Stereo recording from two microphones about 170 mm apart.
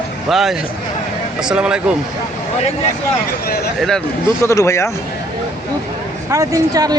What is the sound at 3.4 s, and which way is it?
Speech, 70° left (ahead or behind).